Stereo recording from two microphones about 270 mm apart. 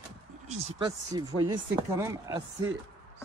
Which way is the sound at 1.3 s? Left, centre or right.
Right.